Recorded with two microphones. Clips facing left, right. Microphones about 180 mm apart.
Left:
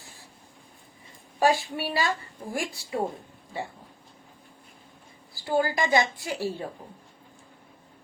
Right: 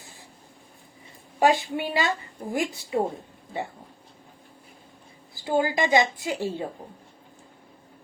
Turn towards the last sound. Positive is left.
turn(degrees=-20)  # may be behind; listen again after turning